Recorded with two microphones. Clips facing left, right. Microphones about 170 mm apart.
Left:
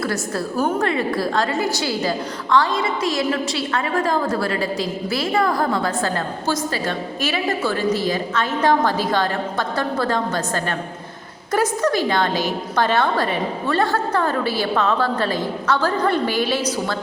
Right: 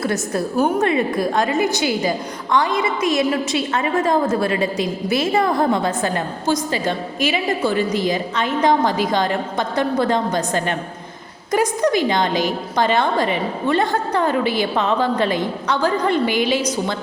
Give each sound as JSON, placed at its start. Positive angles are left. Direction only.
{"t": 0.0, "sound": "a woman's voice", "side_deg": -20}